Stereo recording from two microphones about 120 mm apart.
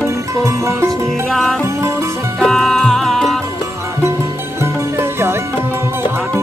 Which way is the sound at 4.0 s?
20° right (ahead or behind).